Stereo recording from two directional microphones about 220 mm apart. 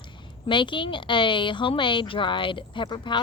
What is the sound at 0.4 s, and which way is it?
A woman's voice, 20° left (ahead or behind).